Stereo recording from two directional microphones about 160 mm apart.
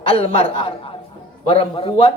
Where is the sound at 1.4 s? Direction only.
35° left (ahead or behind).